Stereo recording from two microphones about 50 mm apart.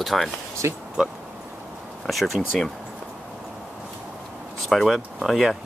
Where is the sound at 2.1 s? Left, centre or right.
Centre.